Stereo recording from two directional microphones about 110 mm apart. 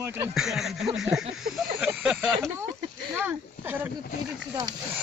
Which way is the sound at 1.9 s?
10° right (ahead or behind).